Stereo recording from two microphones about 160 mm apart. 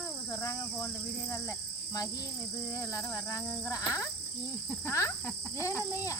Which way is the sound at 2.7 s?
20° left (ahead or behind).